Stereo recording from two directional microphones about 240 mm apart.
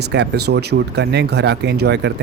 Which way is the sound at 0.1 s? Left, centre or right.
Right.